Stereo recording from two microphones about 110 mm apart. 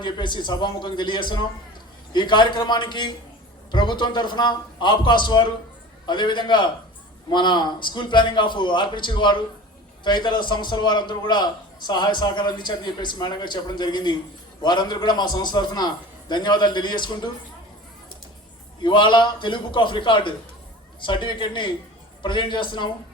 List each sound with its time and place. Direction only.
0.0 s a man's voice: 45° left (ahead or behind)
18.8 s a man's voice: 45° left (ahead or behind)